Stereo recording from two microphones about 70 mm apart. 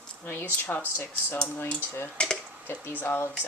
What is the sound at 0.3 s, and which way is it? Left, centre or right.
A woman's voice, left.